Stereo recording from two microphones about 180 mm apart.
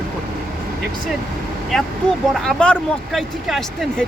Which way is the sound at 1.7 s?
Centre (ahead or behind).